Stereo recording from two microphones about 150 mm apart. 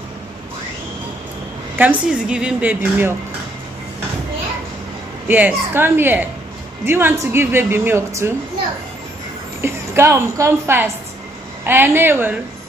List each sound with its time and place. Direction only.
1.8 s speech: 10° right (ahead or behind)
5.3 s speech: 15° right (ahead or behind)
9.6 s a woman's voice: 15° right (ahead or behind)